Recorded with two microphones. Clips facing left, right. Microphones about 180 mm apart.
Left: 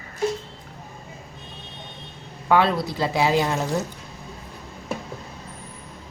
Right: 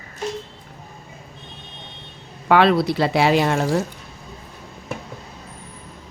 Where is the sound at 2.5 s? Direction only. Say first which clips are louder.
Right 4 dB; 75° right (ahead or behind).